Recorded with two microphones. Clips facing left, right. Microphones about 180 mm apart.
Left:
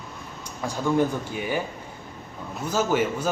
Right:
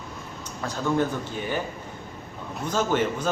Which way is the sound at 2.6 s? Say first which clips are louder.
Left 1 dB; 5° left (ahead or behind).